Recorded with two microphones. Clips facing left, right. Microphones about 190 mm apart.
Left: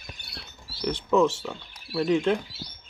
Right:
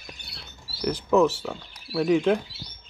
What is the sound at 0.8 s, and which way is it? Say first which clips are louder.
Speech: right 2 dB; 5° right (ahead or behind).